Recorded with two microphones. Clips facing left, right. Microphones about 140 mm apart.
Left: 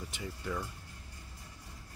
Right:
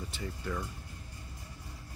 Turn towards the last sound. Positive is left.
turn(degrees=5)  # may be behind; listen again after turning